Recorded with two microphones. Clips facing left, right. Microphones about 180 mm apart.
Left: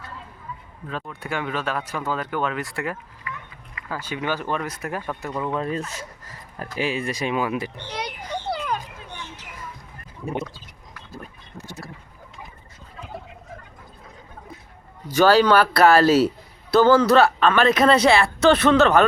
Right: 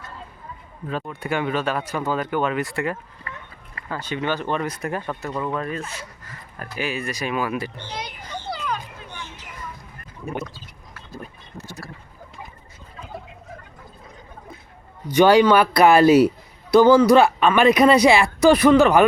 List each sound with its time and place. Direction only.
0.9 s speech: 5° right (ahead or behind)
3.3 s a sound: 35° right (ahead or behind)
3.8 s speech: 10° left (ahead or behind)
5.7 s speech: 40° left (ahead or behind)
6.7 s speech: 30° left (ahead or behind)
7.9 s a child's voice: 65° left (ahead or behind)
8.4 s a sound: 55° left (ahead or behind)
11.5 s speech: 20° left (ahead or behind)
15.1 s speech: 15° right (ahead or behind)